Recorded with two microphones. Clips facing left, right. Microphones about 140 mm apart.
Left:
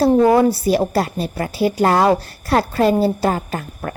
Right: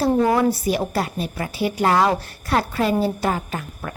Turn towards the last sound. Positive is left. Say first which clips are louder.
# left 4 dB
turn(degrees=45)  # may be behind; listen again after turning